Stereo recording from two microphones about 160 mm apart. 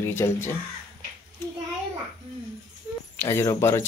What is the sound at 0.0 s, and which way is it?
Speech, 15° left (ahead or behind).